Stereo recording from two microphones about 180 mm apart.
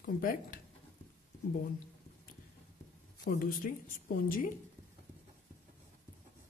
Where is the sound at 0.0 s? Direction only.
50° left (ahead or behind).